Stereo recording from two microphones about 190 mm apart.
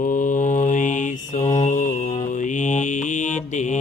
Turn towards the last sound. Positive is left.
turn(degrees=40)  # may be behind; listen again after turning